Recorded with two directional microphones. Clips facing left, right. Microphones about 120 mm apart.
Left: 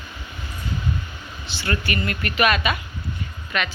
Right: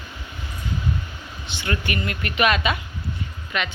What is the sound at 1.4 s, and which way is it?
Speech, 20° right (ahead or behind).